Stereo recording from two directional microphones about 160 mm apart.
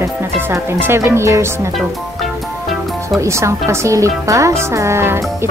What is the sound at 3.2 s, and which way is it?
Speech, 20° right (ahead or behind).